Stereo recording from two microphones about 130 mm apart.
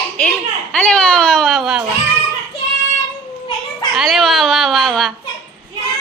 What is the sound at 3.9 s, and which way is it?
Speech, centre (ahead or behind).